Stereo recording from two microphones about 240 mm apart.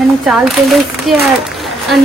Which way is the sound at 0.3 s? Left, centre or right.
Centre.